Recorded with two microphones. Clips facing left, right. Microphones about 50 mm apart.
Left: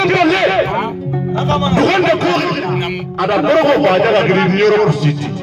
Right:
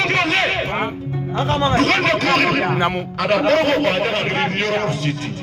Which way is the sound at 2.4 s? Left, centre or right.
Centre.